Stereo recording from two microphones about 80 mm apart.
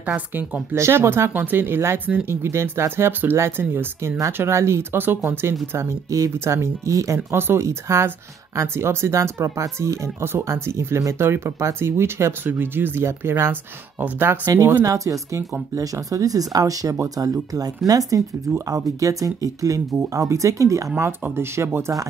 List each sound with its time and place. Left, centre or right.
0.0 s speech: right
0.7 s speech: right
14.4 s speech: right
21.2 s speech: right